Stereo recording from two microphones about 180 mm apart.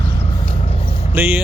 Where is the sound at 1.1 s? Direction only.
10° right (ahead or behind).